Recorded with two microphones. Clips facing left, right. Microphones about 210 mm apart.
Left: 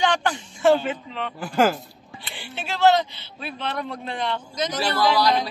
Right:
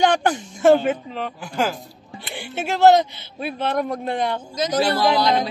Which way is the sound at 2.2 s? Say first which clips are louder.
Right 7 dB; 50° right (ahead or behind).